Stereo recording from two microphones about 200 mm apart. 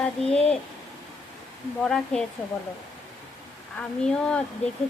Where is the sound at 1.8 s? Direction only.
5° left (ahead or behind).